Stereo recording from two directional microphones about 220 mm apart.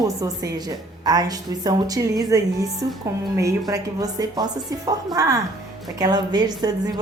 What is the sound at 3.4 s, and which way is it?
A woman's voice, 15° right (ahead or behind).